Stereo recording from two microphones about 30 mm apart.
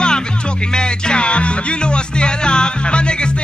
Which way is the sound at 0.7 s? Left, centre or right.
Left.